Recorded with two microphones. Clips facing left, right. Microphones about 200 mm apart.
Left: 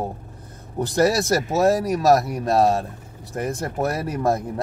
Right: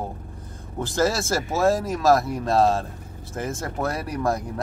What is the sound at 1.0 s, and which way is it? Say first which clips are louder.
A man's voice: left 4 dB; 20° left (ahead or behind).